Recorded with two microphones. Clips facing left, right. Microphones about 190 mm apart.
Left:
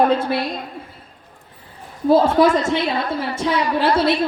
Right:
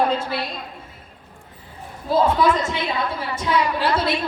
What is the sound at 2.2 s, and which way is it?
Speech, 50° left (ahead or behind).